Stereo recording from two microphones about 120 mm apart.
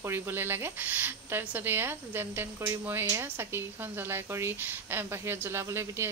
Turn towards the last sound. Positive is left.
turn(degrees=-20)  # may be behind; listen again after turning